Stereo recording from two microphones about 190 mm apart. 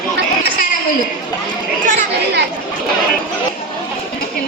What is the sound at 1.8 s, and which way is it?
Chatter, 45° right (ahead or behind).